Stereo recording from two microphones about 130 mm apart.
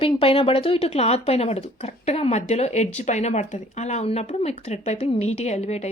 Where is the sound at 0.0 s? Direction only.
45° left (ahead or behind).